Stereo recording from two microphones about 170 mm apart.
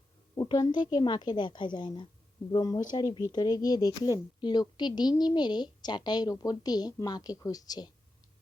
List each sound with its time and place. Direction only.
0.3 s a woman's voice: 25° left (ahead or behind)